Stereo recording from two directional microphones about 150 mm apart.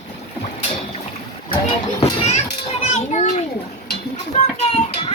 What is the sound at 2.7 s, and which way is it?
Children playing, 50° left (ahead or behind).